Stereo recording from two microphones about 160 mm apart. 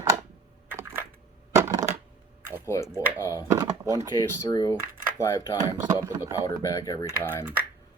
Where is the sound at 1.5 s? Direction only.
20° right (ahead or behind).